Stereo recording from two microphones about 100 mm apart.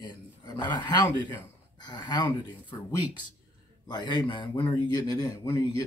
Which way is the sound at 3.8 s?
45° left (ahead or behind).